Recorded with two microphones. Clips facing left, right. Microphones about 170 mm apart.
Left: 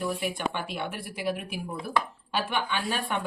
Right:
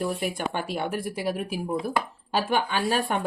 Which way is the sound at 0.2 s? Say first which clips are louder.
Right 2 dB; 40° right (ahead or behind).